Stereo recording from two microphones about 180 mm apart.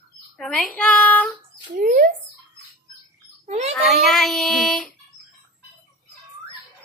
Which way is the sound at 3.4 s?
40° right (ahead or behind).